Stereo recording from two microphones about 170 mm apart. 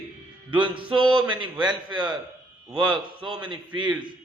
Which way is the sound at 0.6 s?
30° right (ahead or behind).